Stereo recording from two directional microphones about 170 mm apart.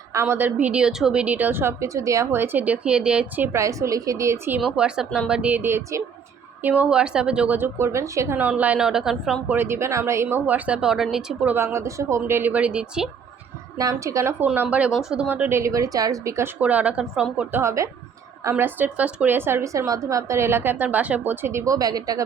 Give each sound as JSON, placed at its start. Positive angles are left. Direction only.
{"t": 0.1, "sound": "a woman's voice", "side_deg": -15}
{"t": 4.6, "sound": "a woman's voice", "side_deg": -5}
{"t": 9.6, "sound": "a woman's voice", "side_deg": -15}
{"t": 13.7, "sound": "a woman's voice", "side_deg": -20}